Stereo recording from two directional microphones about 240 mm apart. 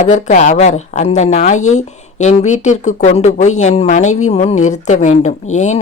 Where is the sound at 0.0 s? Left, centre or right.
Left.